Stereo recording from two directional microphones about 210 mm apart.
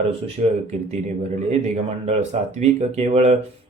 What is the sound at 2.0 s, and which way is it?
Speech, 30° right (ahead or behind).